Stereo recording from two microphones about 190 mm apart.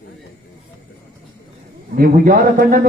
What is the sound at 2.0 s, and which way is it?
Speech, 50° right (ahead or behind).